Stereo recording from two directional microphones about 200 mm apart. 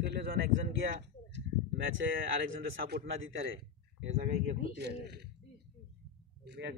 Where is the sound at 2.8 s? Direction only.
55° right (ahead or behind).